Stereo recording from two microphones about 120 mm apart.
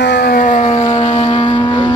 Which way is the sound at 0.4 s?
90° left.